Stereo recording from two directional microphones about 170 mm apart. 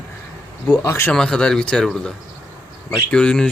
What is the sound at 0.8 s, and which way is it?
Speech, 15° left (ahead or behind).